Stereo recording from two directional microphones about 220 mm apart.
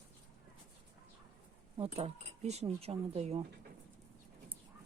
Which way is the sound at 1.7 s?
25° right (ahead or behind).